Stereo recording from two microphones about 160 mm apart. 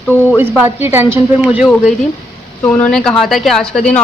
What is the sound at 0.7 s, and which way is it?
Speech, 15° right (ahead or behind).